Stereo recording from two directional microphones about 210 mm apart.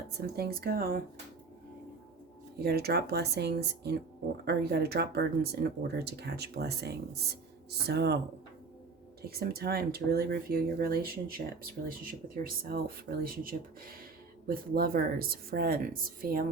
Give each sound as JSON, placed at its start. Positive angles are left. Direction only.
{"t": 0.2, "sound": "speech", "side_deg": -50}
{"t": 2.6, "sound": "speech", "side_deg": -50}
{"t": 9.2, "sound": "speech", "side_deg": -50}